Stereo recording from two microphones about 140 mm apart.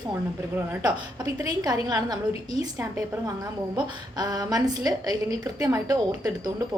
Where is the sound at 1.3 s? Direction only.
30° right (ahead or behind).